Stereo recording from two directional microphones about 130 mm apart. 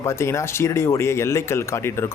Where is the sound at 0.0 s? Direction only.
20° left (ahead or behind).